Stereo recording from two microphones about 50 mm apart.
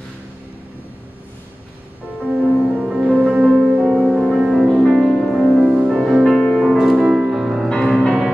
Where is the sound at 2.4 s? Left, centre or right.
Right.